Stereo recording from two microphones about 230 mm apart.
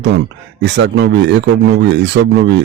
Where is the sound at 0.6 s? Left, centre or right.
Right.